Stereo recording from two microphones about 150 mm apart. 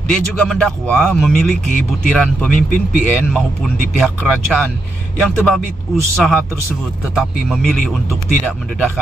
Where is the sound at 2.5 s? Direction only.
65° left (ahead or behind).